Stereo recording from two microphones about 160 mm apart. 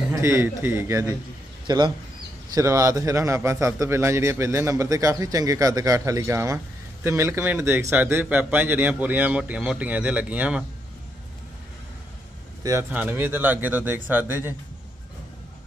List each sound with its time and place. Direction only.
0.1 s a man's voice: 15° right (ahead or behind)
12.9 s a man's voice: 10° right (ahead or behind)